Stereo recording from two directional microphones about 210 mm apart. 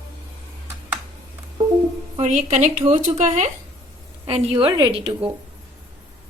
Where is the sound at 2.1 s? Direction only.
35° right (ahead or behind).